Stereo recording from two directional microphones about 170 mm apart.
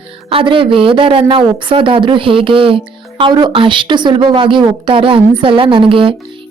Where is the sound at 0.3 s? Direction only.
30° right (ahead or behind).